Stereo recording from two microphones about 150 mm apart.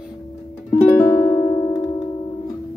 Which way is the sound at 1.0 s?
20° left (ahead or behind).